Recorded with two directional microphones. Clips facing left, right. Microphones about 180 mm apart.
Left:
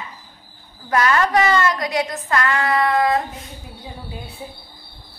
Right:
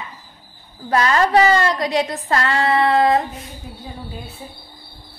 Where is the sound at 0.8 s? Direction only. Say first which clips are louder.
Right 1 dB; 30° right (ahead or behind).